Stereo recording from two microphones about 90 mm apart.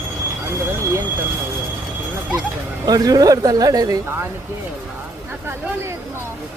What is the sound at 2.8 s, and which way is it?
Speech, 45° right (ahead or behind).